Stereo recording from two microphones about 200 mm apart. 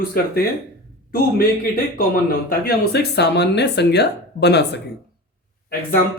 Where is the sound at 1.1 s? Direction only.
45° left (ahead or behind).